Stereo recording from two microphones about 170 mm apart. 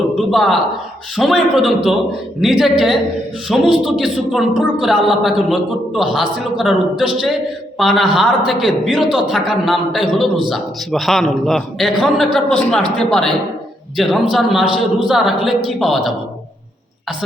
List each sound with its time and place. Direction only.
0.2 s a woman's voice: centre (ahead or behind)